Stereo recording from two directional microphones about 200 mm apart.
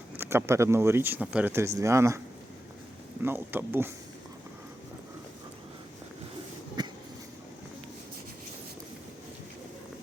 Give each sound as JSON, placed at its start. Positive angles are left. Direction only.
{"t": 0.2, "sound": "speech", "side_deg": -10}
{"t": 3.2, "sound": "speech", "side_deg": -10}
{"t": 6.8, "sound": "a sound", "side_deg": -20}